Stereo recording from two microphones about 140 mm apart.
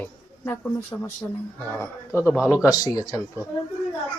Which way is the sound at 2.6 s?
25° left (ahead or behind).